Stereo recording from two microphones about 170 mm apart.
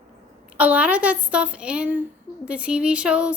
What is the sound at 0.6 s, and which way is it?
A woman's voice, 10° right (ahead or behind).